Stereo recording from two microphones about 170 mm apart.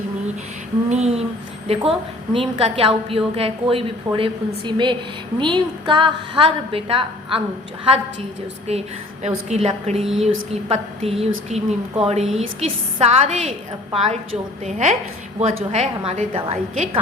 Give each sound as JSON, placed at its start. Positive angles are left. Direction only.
{"t": 0.9, "sound": "a woman's voice", "side_deg": -40}
{"t": 8.7, "sound": "a woman's voice", "side_deg": -40}
{"t": 10.0, "sound": "speech", "side_deg": 0}
{"t": 10.5, "sound": "a woman's voice", "side_deg": -35}